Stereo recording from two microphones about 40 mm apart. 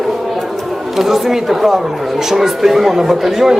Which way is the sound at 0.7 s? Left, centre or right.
Centre.